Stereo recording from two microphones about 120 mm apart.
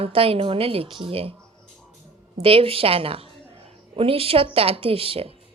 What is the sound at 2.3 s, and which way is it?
A woman's voice, 50° right (ahead or behind).